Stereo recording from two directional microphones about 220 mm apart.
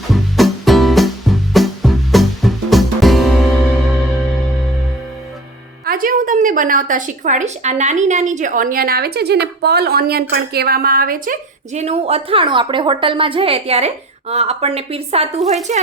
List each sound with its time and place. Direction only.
0.1 s music: centre (ahead or behind)
5.8 s a woman's voice: 40° right (ahead or behind)